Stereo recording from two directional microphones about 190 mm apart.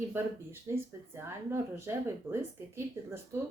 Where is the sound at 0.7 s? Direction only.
15° right (ahead or behind).